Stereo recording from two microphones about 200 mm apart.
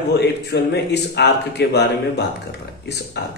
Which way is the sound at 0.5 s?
55° left (ahead or behind).